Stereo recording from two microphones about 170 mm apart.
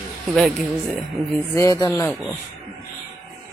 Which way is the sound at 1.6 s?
20° left (ahead or behind).